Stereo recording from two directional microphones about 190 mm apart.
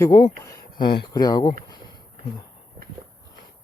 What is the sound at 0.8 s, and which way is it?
Speech, 55° left (ahead or behind).